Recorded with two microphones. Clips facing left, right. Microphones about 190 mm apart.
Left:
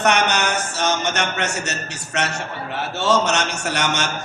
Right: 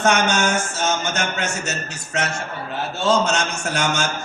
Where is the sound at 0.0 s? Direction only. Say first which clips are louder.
Right 1 dB; 70° left (ahead or behind).